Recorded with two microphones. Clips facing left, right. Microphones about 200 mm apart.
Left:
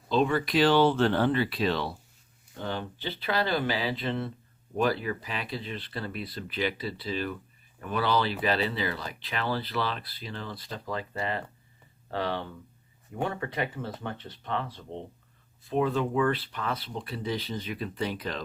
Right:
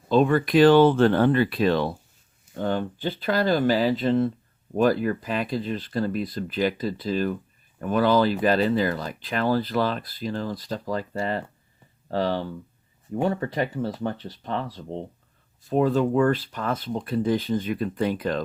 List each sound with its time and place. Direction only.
0.1 s speech: 50° right (ahead or behind)